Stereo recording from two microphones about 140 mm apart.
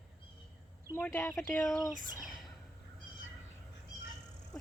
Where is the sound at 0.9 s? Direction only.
15° left (ahead or behind).